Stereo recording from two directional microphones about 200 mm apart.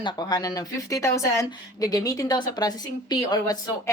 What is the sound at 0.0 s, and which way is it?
Speech, 20° left (ahead or behind).